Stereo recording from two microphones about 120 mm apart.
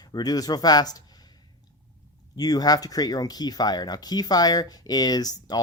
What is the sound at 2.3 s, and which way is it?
Speech, 30° left (ahead or behind).